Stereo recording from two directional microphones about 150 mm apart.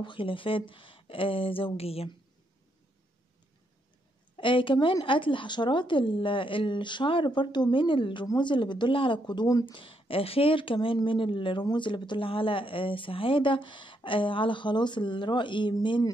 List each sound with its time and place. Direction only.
0.0 s speech: 35° left (ahead or behind)
4.4 s speech: 35° left (ahead or behind)
9.8 s speech: 35° left (ahead or behind)